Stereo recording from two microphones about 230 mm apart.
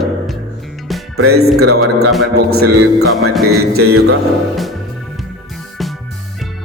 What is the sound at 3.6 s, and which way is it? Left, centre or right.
Speech, right.